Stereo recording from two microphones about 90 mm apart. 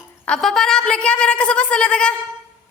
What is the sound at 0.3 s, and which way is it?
A woman's voice, 5° left (ahead or behind).